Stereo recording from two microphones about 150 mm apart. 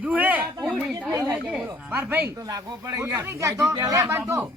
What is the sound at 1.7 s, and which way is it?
Speech, 10° right (ahead or behind).